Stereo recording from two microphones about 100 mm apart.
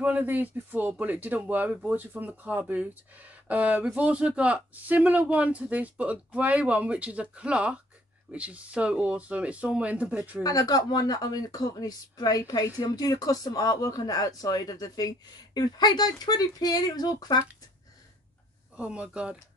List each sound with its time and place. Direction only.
0.0 s speech: 15° right (ahead or behind)
10.4 s speech: 40° left (ahead or behind)
18.8 s speech: 10° right (ahead or behind)